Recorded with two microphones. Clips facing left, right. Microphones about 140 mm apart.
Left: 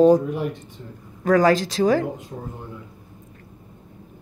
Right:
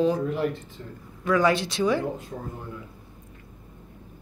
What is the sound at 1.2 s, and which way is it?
Speech, 40° left (ahead or behind).